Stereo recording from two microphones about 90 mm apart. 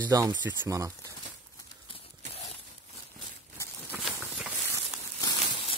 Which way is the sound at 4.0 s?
Centre (ahead or behind).